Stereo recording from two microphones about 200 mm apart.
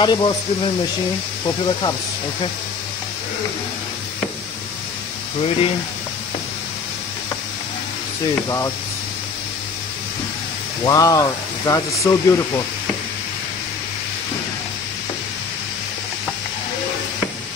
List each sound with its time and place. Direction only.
0.0 s speech: 20° left (ahead or behind)
10.8 s speech: 20° left (ahead or behind)